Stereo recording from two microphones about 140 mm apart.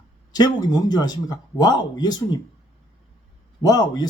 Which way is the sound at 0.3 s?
30° left (ahead or behind).